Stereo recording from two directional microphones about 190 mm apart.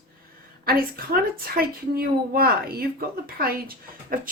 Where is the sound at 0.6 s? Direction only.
50° right (ahead or behind).